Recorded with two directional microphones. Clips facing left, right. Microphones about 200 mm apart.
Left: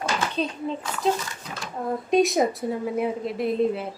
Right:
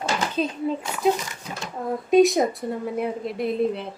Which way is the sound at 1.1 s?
15° right (ahead or behind).